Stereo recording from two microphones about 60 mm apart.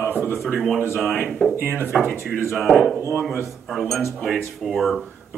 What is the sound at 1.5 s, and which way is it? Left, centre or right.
Speech, left.